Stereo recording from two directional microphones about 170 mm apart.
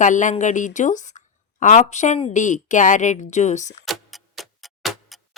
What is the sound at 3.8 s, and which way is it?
Clock, centre (ahead or behind).